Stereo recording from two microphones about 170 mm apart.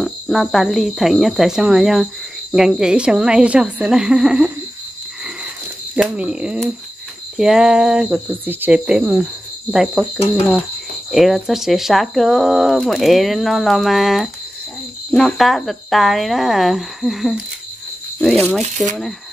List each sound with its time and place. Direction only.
0.0 s speech: centre (ahead or behind)
5.9 s speech: 5° right (ahead or behind)
11.1 s speech: centre (ahead or behind)
18.6 s speech: 45° right (ahead or behind)